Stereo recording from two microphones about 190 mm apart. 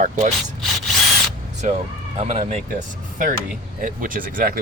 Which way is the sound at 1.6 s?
40° right (ahead or behind).